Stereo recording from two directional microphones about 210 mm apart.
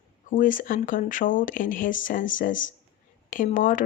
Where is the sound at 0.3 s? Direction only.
40° left (ahead or behind).